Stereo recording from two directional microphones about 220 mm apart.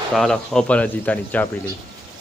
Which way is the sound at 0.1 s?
5° left (ahead or behind).